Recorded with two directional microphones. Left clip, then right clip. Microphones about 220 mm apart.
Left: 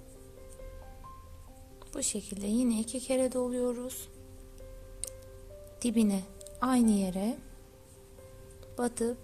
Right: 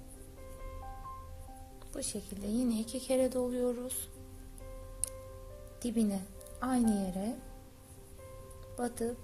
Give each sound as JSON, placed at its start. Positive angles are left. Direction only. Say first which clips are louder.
{"t": 1.9, "sound": "speech", "louder": "left 5 dB", "side_deg": 25}
{"t": 5.8, "sound": "a woman's voice", "louder": "left 4 dB", "side_deg": 25}
{"t": 8.7, "sound": "speech", "louder": "left 4 dB", "side_deg": 25}